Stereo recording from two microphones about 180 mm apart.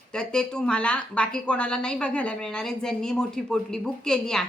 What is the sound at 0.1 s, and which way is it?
A woman's voice, 5° left (ahead or behind).